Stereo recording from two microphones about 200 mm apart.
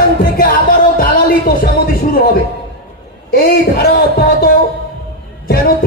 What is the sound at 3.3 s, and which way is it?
Speech, 50° left (ahead or behind).